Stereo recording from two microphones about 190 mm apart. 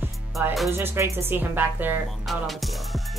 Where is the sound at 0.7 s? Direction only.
10° right (ahead or behind).